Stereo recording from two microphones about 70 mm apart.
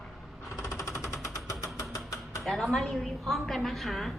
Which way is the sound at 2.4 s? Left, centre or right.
Centre.